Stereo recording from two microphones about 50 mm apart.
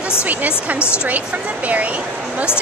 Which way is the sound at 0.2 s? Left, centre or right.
Right.